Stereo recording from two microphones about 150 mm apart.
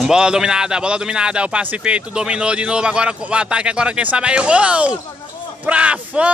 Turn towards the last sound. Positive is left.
turn(degrees=-10)  # may be behind; listen again after turning